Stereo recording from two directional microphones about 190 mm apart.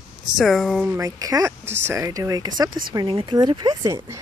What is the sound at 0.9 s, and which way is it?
Speech, 15° right (ahead or behind).